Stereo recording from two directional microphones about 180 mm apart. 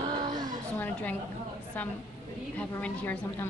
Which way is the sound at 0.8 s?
10° left (ahead or behind).